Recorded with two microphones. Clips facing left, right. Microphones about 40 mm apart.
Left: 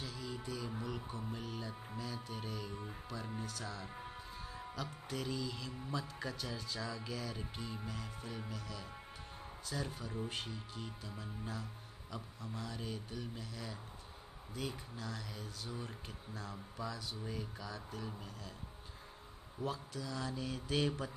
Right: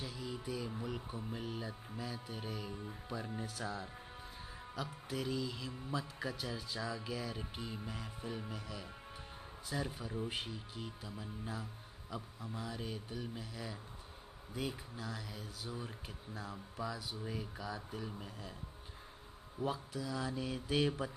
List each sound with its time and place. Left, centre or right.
0.0 s a sound: centre
0.8 s speech: centre
4.6 s speech: centre
19.6 s speech: centre